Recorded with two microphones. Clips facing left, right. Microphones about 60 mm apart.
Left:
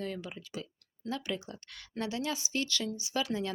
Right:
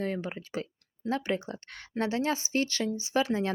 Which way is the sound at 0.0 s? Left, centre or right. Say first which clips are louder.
Right 6 dB; right.